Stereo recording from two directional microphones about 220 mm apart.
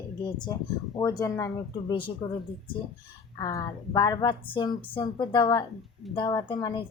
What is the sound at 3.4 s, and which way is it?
A woman's voice, 15° left (ahead or behind).